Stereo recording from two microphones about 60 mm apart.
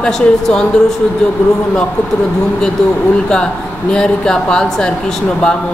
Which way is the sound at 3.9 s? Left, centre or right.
Centre.